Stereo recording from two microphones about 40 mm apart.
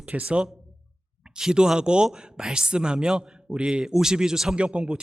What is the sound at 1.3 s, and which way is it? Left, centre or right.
Speech, centre.